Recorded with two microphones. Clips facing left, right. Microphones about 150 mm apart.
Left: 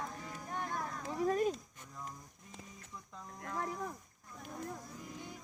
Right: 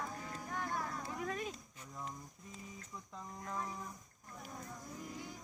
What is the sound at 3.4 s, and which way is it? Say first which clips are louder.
Cattle: left 5 dB; 65° left (ahead or behind).